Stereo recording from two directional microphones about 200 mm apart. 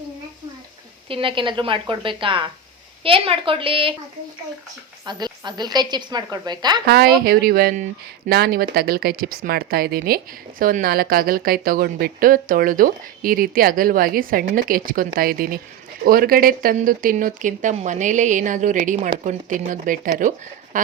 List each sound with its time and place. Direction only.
1.0 s a woman's voice: 25° right (ahead or behind)
5.0 s a woman's voice: 20° right (ahead or behind)
6.8 s speech: 55° right (ahead or behind)